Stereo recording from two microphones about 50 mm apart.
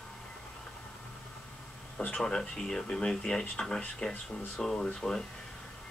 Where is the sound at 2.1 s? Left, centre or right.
Centre.